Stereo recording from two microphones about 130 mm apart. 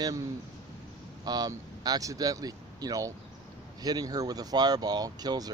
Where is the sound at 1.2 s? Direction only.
30° right (ahead or behind).